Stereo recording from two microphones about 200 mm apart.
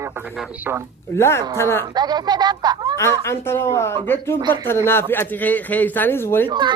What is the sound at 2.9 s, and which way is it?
Speech, 15° left (ahead or behind).